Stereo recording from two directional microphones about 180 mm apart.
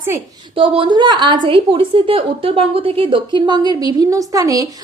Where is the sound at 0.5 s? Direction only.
30° right (ahead or behind).